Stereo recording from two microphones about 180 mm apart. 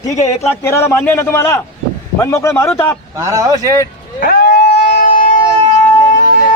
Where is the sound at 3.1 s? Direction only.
20° right (ahead or behind).